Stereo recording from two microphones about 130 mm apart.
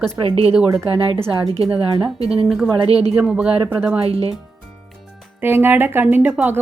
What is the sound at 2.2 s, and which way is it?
Speech, 50° right (ahead or behind).